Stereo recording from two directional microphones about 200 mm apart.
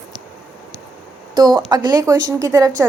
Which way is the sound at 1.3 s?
20° right (ahead or behind).